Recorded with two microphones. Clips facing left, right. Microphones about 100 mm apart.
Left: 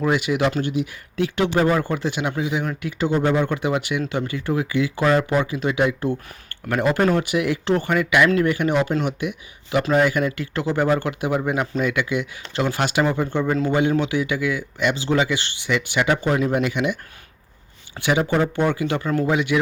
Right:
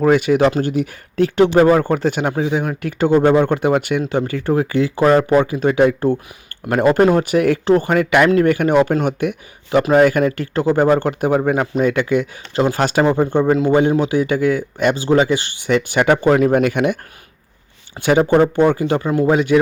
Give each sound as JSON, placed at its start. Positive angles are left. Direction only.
{"t": 0.0, "sound": "speech", "side_deg": -40}
{"t": 18.0, "sound": "speech", "side_deg": -40}
{"t": 19.0, "sound": "speech", "side_deg": -20}
{"t": 19.3, "sound": "speech", "side_deg": -40}